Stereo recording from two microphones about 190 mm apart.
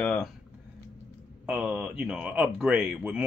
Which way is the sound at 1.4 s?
5° right (ahead or behind).